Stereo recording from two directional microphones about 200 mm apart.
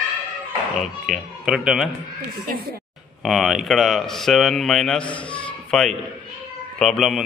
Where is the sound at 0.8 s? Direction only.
Centre (ahead or behind).